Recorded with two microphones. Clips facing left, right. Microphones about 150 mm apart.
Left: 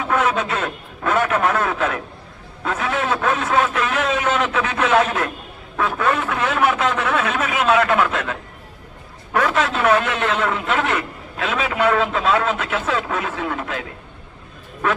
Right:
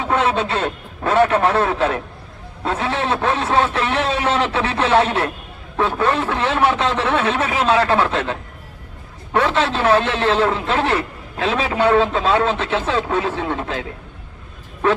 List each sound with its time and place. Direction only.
0.0 s a man's voice: 30° right (ahead or behind)
14.8 s a man's voice: 30° right (ahead or behind)